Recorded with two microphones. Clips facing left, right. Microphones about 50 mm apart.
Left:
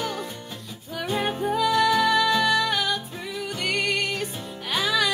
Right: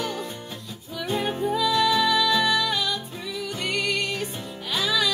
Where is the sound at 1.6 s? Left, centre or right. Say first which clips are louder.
Left 2 dB; left.